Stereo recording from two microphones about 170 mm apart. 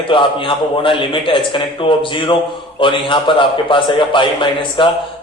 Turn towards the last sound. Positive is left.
turn(degrees=30)  # may be behind; listen again after turning